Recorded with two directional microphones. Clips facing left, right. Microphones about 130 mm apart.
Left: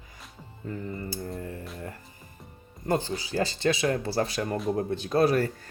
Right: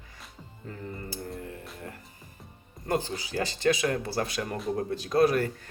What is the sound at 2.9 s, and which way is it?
Speech, 30° left (ahead or behind).